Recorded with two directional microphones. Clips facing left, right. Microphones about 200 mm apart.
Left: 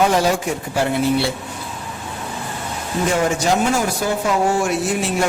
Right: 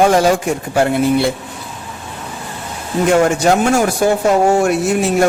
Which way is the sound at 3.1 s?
55° right (ahead or behind).